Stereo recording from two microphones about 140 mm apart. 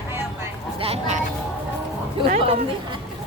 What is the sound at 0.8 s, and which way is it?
Speech, 50° right (ahead or behind).